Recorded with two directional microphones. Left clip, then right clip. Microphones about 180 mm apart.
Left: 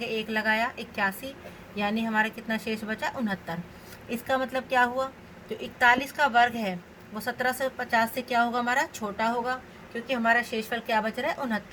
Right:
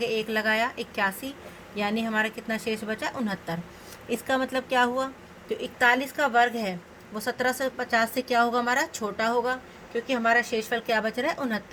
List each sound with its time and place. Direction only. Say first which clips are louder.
0.0 s a woman's voice: right 2 dB; 55° right (ahead or behind)